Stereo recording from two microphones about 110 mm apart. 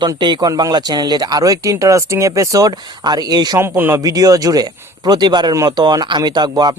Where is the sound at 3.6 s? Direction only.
20° right (ahead or behind).